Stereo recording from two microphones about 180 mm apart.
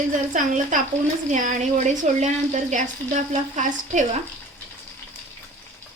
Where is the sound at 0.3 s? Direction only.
45° right (ahead or behind).